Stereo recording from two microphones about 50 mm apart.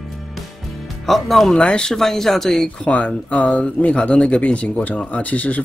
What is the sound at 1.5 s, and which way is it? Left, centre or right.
Speech, left.